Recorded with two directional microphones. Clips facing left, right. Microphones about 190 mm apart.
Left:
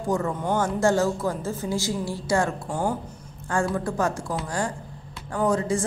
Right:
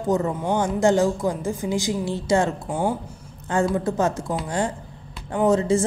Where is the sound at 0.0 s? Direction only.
20° right (ahead or behind).